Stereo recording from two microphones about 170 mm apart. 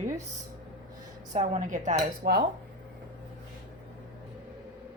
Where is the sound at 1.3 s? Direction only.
45° right (ahead or behind).